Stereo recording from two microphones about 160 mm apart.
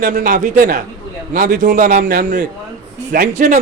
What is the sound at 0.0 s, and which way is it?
A man's voice, 55° right (ahead or behind).